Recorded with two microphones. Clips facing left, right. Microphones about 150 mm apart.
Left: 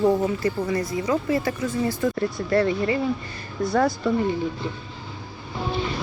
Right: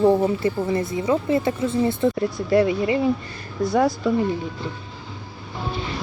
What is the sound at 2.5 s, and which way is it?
Speech, 15° right (ahead or behind).